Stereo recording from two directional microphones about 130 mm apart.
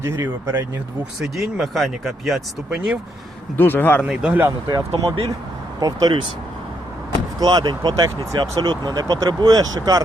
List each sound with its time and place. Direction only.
0.0 s speech: 20° right (ahead or behind)
1.2 s speech: centre (ahead or behind)
3.6 s speech: 15° left (ahead or behind)
4.0 s speech: 10° right (ahead or behind)
5.0 s speech: 45° right (ahead or behind)
5.8 s speech: 30° right (ahead or behind)
7.3 s speech: 35° right (ahead or behind)